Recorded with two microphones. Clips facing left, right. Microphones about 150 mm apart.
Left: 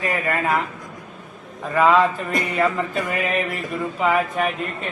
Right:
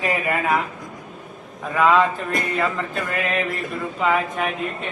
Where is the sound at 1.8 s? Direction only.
Centre (ahead or behind).